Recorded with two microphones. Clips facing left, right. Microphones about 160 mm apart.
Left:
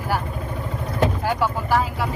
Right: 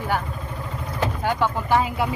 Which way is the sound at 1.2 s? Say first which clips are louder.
Even; 5° left (ahead or behind).